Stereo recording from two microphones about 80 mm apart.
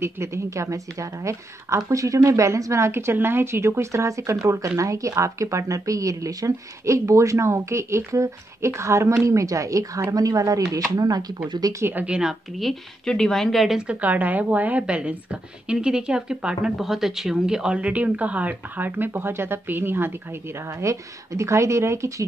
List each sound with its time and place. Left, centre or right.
0.0 s a woman's voice: right
11.4 s speech: right
11.8 s a woman's voice: right
12.2 s a woman's voice: centre
13.7 s speech: centre
20.8 s a woman's voice: right